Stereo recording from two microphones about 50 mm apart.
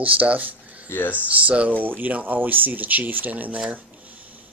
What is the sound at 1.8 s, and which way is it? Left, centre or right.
Speech, right.